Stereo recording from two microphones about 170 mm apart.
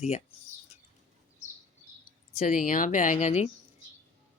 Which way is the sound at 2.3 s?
55° left (ahead or behind).